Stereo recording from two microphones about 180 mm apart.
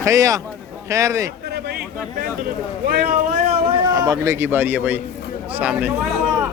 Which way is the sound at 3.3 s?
35° right (ahead or behind).